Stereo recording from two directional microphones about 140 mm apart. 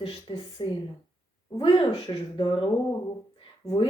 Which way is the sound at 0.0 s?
40° left (ahead or behind).